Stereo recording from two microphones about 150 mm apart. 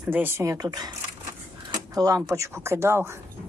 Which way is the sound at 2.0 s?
25° right (ahead or behind).